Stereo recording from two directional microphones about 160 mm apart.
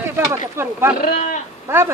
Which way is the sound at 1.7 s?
15° right (ahead or behind).